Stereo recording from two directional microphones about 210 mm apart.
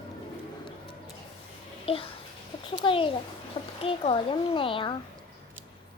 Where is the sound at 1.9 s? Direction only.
25° left (ahead or behind).